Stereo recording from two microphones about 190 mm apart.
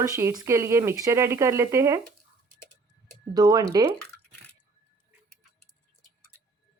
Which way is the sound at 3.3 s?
20° right (ahead or behind).